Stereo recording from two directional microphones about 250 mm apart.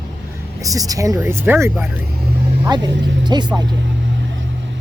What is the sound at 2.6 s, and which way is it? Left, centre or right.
Speech, centre.